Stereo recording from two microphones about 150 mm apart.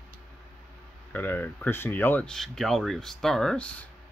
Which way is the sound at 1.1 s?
10° left (ahead or behind).